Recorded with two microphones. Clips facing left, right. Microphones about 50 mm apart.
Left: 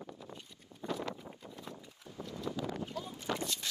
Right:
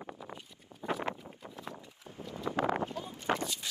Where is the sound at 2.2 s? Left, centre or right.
Right.